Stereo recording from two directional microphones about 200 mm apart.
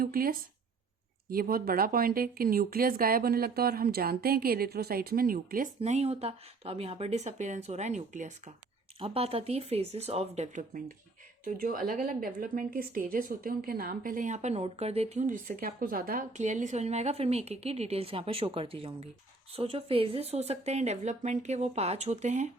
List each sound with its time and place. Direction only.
0.0 s speech: 45° right (ahead or behind)